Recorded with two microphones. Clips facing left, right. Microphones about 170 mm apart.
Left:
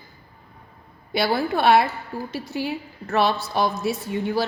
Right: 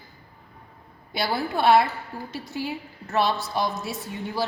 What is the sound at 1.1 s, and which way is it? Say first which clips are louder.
A woman's voice: left 4 dB; 70° left (ahead or behind).